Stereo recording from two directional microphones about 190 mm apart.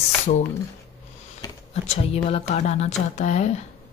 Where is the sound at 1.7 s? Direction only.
30° left (ahead or behind).